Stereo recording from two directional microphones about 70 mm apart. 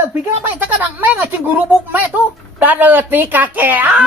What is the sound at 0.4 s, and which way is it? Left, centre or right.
Speech, right.